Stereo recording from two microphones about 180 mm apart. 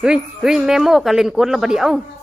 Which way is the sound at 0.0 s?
5° right (ahead or behind).